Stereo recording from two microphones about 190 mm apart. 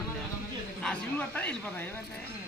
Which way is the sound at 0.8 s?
5° left (ahead or behind).